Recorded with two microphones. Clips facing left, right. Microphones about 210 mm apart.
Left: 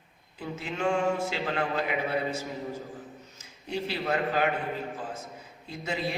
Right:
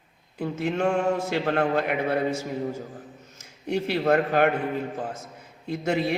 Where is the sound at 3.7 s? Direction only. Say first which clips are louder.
Right 7 dB; 60° right (ahead or behind).